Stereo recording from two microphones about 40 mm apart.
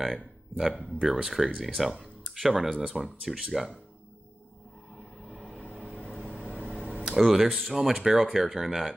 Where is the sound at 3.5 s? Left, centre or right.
Centre.